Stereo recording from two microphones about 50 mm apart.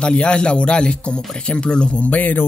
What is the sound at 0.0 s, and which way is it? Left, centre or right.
Speech, centre.